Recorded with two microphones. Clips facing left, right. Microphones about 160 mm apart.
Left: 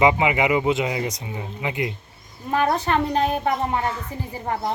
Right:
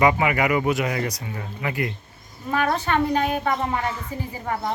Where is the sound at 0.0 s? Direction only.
20° left (ahead or behind).